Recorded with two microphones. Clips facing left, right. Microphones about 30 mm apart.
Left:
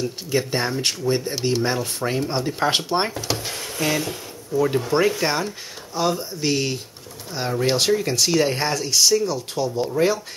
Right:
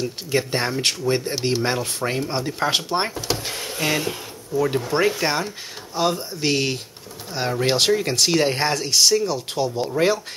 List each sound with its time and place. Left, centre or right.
0.3 s speech: centre; by 1.6 s right
2.0 s speech: centre
3.2 s drawer open or close: centre
3.7 s speech: centre
4.6 s speech: centre; by 10.2 s right